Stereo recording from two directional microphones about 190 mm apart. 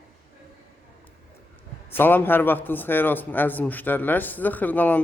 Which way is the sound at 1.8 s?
10° left (ahead or behind).